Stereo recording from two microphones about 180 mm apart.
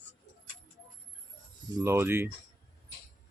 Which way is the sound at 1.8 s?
15° right (ahead or behind).